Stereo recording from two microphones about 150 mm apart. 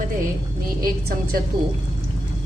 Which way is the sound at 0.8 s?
75° right (ahead or behind).